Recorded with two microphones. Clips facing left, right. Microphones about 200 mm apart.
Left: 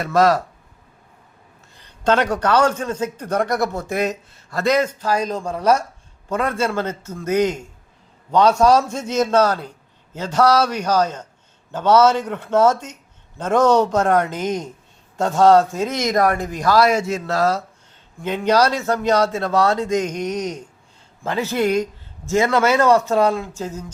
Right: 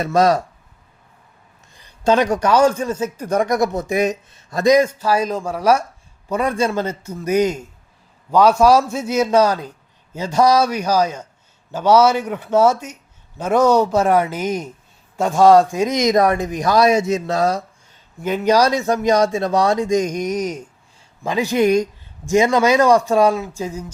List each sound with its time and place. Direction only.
0.0 s a man's voice: 20° right (ahead or behind)
1.7 s a man's voice: 10° right (ahead or behind)